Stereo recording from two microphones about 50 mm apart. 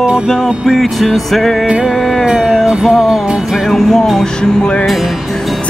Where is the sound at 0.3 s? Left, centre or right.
Centre.